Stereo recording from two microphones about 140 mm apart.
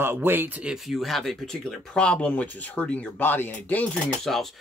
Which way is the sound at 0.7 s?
Centre (ahead or behind).